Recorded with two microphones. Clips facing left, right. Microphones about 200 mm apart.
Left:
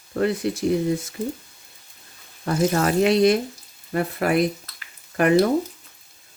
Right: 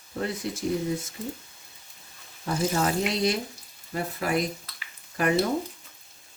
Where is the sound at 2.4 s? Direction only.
65° left (ahead or behind).